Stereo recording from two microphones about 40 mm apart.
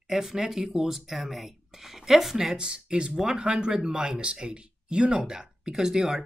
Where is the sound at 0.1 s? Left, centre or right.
Centre.